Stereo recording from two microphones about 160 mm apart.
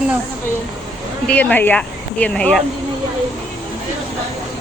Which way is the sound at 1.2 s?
10° left (ahead or behind).